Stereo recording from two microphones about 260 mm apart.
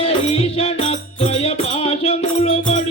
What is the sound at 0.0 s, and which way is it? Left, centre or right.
Music, left.